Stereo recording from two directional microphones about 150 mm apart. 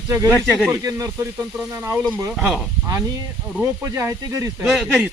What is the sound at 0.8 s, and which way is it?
Speech, 20° right (ahead or behind).